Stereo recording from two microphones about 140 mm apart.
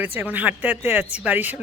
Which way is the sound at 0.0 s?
15° right (ahead or behind).